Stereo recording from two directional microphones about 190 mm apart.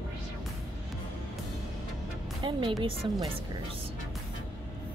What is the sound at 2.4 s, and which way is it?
Speech, 25° right (ahead or behind).